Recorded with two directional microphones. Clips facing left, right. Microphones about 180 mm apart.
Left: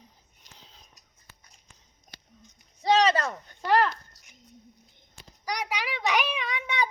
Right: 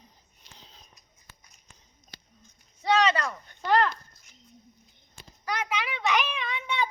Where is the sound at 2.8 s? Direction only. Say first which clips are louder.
Left 2 dB; 35° left (ahead or behind).